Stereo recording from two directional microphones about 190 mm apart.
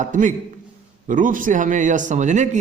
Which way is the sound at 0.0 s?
40° right (ahead or behind).